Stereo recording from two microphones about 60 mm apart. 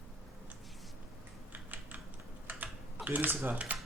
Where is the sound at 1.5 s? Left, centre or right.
Right.